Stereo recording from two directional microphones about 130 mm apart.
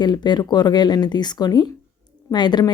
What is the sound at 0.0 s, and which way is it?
Speech, 35° left (ahead or behind).